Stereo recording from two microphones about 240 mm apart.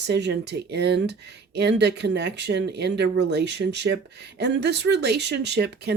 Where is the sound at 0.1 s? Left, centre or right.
Right.